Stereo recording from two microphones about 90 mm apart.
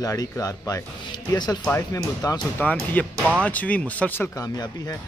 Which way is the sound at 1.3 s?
50° left (ahead or behind).